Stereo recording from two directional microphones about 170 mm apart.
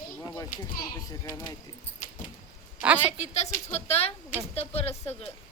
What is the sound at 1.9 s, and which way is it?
Dog, 50° left (ahead or behind).